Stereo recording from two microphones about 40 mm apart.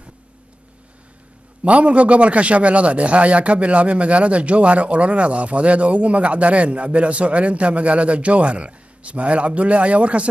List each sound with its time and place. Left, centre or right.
1.6 s a man's voice: right